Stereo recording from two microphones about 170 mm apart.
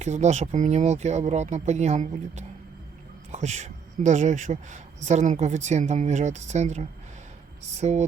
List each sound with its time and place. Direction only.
0.0 s a woman's voice: 40° right (ahead or behind)